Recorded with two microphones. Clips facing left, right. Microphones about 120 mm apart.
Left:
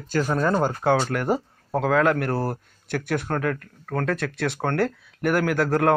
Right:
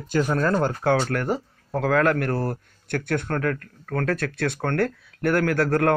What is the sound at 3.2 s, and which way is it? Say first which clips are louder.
Speech: even; 20° left (ahead or behind).